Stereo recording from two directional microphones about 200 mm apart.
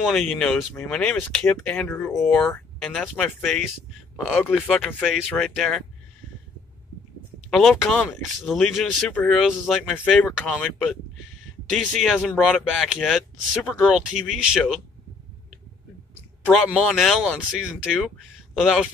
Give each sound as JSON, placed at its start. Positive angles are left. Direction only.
{"t": 0.0, "sound": "speech", "side_deg": 0}
{"t": 7.4, "sound": "speech", "side_deg": 0}
{"t": 11.7, "sound": "speech", "side_deg": 0}
{"t": 16.5, "sound": "speech", "side_deg": 0}
{"t": 18.5, "sound": "a man's voice", "side_deg": 0}